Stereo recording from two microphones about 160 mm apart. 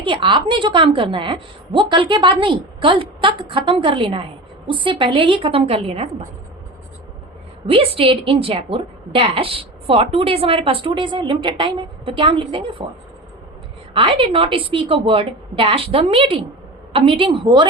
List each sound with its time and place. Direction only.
0.0 s a woman's voice: 30° right (ahead or behind)
7.7 s a woman's voice: 35° right (ahead or behind)
13.9 s a woman's voice: 35° right (ahead or behind)